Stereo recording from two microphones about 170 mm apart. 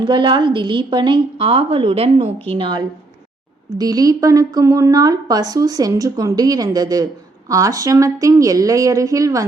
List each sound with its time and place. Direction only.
0.0 s a woman's voice: 25° right (ahead or behind)